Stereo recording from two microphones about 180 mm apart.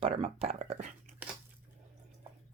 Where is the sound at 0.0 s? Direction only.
30° right (ahead or behind).